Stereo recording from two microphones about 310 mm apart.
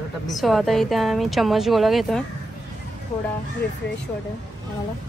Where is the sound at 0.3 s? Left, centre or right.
Centre.